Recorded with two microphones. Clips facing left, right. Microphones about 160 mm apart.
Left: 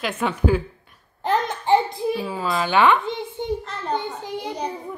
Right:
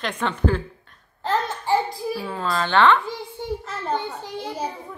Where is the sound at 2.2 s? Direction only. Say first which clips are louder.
Left 1 dB; 5° left (ahead or behind).